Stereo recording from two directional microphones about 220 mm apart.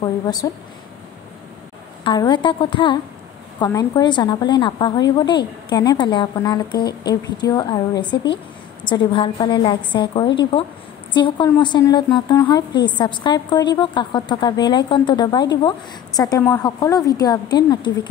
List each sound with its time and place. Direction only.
0.0 s a woman's voice: 20° left (ahead or behind)
2.0 s a woman's voice: 20° left (ahead or behind)